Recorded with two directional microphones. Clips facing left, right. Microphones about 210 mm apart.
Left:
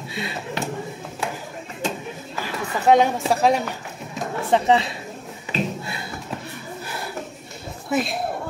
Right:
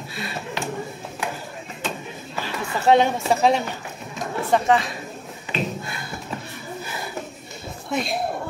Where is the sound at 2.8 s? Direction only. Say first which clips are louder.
Even; 10° left (ahead or behind).